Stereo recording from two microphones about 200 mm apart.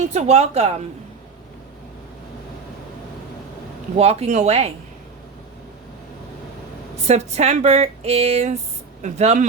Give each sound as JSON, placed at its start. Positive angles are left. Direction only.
{"t": 0.0, "sound": "speech", "side_deg": -35}
{"t": 3.9, "sound": "speech", "side_deg": -30}
{"t": 7.1, "sound": "speech", "side_deg": -35}